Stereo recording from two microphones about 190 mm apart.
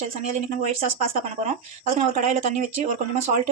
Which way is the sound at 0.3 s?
35° right (ahead or behind).